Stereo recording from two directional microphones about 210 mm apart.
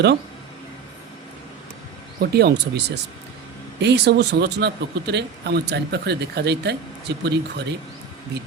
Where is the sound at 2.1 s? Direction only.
50° right (ahead or behind).